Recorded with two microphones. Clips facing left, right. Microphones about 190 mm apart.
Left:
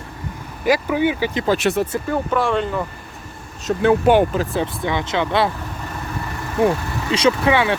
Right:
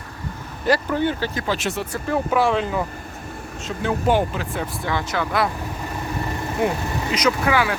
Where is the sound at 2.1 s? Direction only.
Centre (ahead or behind).